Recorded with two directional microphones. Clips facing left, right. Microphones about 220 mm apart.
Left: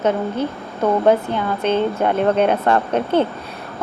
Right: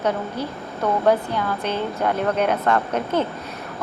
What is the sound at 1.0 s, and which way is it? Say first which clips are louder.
A woman's voice: left 3 dB; 20° left (ahead or behind).